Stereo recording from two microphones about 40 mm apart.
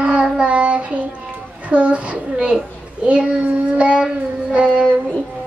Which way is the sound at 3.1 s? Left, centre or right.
Right.